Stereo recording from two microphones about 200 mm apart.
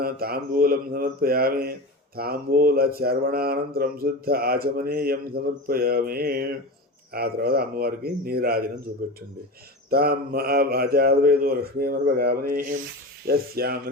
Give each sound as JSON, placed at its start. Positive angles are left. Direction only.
{"t": 0.0, "sound": "speech", "side_deg": -50}